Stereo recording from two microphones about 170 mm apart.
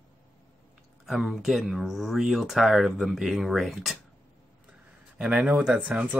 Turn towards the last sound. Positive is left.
turn(degrees=-5)  # may be behind; listen again after turning